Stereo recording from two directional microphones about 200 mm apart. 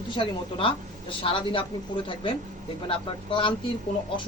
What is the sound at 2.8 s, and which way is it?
Speech, 25° left (ahead or behind).